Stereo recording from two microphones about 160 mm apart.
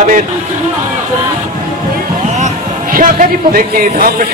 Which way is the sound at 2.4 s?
55° right (ahead or behind).